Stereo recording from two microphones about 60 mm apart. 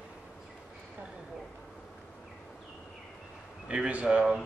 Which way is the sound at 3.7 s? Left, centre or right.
Right.